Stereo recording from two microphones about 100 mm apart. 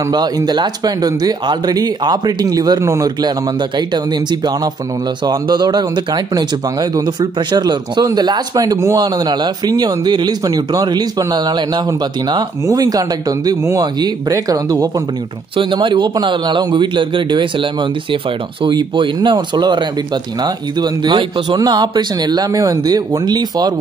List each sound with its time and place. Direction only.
0.1 s speech: 45° right (ahead or behind)
3.2 s speech: 45° right (ahead or behind)
15.5 s speech: 55° right (ahead or behind)